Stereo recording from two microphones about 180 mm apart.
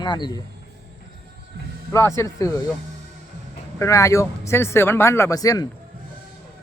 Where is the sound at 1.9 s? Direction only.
15° left (ahead or behind).